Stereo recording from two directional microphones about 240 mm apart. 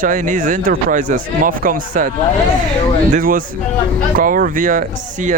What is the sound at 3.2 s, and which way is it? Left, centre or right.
Speech, right.